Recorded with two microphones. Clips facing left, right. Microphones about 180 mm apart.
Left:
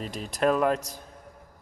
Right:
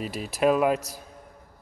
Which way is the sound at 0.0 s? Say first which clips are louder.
Right 2 dB; 5° right (ahead or behind).